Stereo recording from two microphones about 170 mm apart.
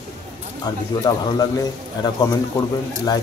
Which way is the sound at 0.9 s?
20° left (ahead or behind).